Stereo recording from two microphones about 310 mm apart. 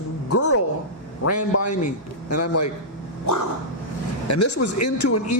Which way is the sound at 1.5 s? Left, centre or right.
Left.